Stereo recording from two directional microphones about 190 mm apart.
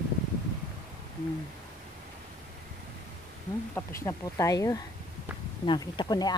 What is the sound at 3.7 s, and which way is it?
Speech, 15° left (ahead or behind).